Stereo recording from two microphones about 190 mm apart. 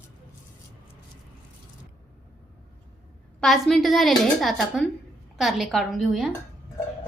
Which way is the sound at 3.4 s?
Centre (ahead or behind).